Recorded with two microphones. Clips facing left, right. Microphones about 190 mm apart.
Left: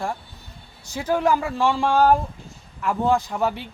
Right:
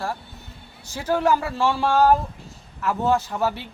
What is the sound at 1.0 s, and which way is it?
Speech, 10° left (ahead or behind).